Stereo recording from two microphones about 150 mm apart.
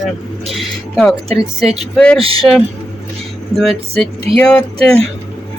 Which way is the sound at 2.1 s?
40° right (ahead or behind).